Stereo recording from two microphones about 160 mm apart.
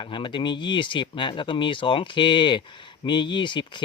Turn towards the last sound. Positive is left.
turn(degrees=30)  # may be behind; listen again after turning